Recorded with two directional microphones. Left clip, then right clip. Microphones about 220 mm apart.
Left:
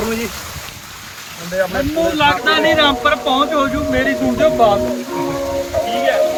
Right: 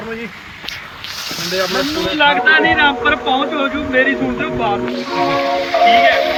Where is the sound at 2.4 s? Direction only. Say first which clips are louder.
Right 2 dB; 30° left (ahead or behind).